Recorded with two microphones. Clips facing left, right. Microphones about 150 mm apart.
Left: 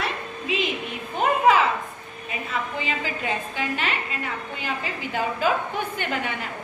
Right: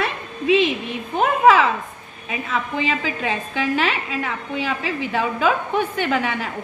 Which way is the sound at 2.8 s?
90° right.